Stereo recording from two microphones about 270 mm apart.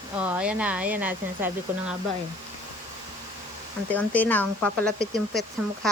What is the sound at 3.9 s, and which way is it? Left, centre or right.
Speech, centre.